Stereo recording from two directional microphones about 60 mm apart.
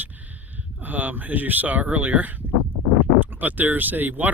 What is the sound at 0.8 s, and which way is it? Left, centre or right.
Speech, right.